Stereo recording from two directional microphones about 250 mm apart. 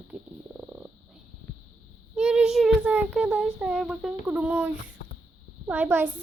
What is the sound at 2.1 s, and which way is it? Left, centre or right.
A child's voice, centre.